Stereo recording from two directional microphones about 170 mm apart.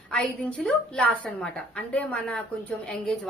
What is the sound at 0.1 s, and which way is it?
A woman's voice, 5° left (ahead or behind).